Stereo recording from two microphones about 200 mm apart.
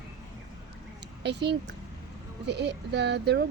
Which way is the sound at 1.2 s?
60° right (ahead or behind).